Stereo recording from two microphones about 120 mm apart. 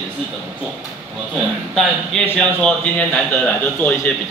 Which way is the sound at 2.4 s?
5° left (ahead or behind).